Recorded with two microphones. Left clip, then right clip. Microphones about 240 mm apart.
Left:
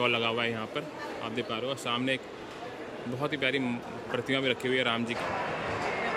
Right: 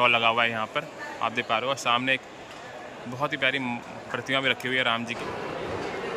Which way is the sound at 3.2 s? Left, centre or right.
Centre.